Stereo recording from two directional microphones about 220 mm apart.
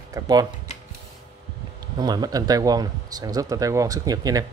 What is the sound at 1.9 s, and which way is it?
Speech, 20° right (ahead or behind).